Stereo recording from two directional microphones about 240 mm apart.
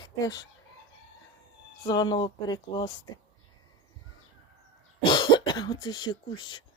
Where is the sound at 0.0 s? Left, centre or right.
Centre.